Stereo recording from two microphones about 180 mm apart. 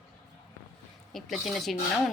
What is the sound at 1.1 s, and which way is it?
Speech, centre (ahead or behind).